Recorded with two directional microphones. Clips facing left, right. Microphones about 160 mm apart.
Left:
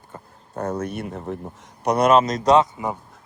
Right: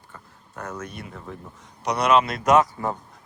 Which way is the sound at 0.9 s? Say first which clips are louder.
Left 8 dB; 60° left (ahead or behind).